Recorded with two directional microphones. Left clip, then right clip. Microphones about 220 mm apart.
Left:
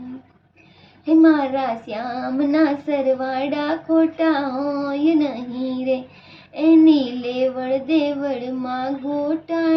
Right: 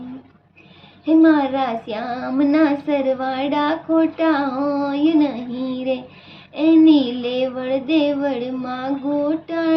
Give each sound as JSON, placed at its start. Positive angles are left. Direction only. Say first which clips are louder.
{"t": 1.0, "sound": "child singing", "louder": "right 1 dB", "side_deg": -15}